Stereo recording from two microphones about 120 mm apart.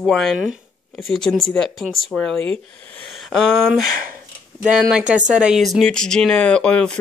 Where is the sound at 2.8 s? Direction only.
10° left (ahead or behind).